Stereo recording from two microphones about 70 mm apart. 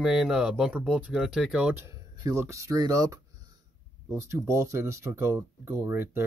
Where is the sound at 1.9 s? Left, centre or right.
Right.